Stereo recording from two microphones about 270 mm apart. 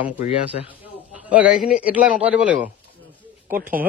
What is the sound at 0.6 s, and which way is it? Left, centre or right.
Speech, centre.